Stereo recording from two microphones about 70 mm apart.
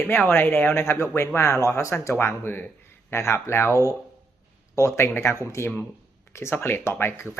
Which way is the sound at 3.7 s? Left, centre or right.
Right.